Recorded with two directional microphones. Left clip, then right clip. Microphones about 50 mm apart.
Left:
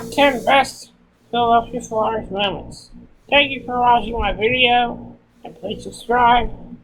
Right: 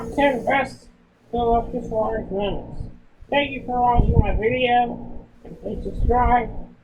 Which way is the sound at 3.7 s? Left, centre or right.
Left.